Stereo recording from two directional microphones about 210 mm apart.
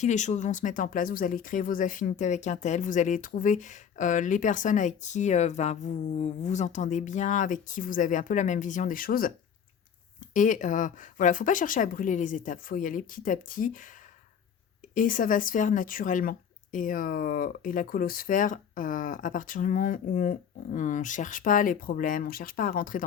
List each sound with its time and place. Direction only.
0.0 s speech: 35° left (ahead or behind)
10.3 s speech: 40° left (ahead or behind)
14.9 s speech: 40° left (ahead or behind)